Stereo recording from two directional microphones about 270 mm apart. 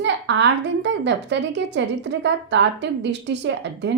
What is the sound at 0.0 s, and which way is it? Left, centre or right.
A woman's voice, right.